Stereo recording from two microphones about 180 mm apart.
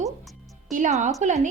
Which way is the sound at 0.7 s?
40° right (ahead or behind).